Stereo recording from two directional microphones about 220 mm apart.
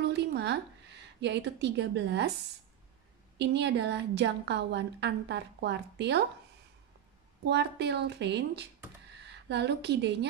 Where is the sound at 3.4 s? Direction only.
50° right (ahead or behind).